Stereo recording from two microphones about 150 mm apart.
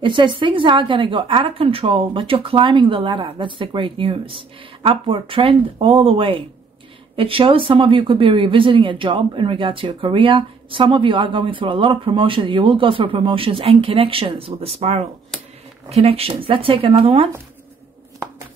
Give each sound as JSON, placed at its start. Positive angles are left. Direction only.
{"t": 0.0, "sound": "speech", "side_deg": -30}
{"t": 15.3, "sound": "a sound", "side_deg": 5}
{"t": 15.9, "sound": "speech", "side_deg": -45}